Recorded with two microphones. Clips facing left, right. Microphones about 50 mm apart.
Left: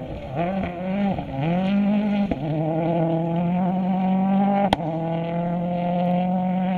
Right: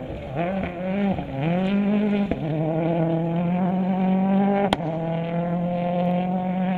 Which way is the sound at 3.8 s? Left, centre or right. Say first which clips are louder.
Even; right.